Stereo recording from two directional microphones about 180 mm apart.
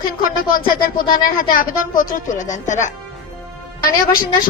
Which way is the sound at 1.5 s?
50° left (ahead or behind).